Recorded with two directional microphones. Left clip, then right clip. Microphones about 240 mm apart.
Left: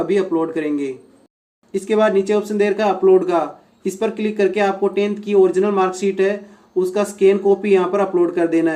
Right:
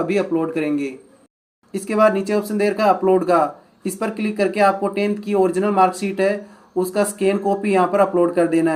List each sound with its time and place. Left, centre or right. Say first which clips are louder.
0.3 s speech: left 1 dB; centre